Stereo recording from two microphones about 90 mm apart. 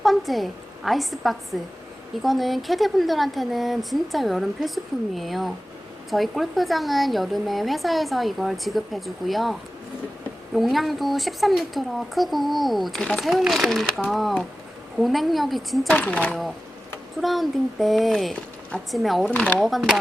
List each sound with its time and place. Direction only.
0.0 s a woman's voice: centre (ahead or behind)
15.9 s speech: 15° left (ahead or behind)
17.2 s a woman's voice: centre (ahead or behind)
19.3 s speech: 15° left (ahead or behind)
19.5 s a woman's voice: centre (ahead or behind)